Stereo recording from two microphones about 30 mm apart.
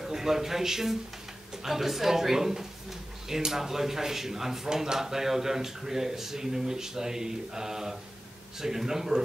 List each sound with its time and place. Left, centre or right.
0.0 s speech: centre
4.6 s speech: right